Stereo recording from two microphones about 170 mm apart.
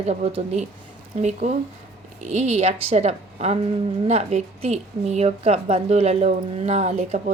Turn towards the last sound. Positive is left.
turn(degrees=-45)  # may be behind; listen again after turning